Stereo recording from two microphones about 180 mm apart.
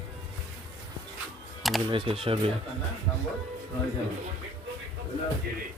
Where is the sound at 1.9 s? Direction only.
30° right (ahead or behind).